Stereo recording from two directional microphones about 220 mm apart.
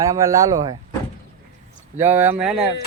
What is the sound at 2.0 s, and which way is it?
Speech, 10° right (ahead or behind).